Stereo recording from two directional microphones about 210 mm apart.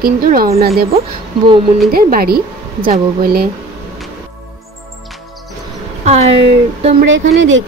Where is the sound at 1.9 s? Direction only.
45° right (ahead or behind).